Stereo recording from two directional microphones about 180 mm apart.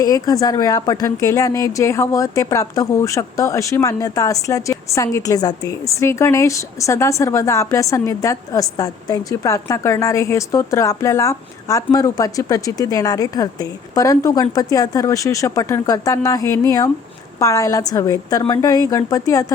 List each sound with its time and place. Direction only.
0.0 s a woman's voice: 20° left (ahead or behind)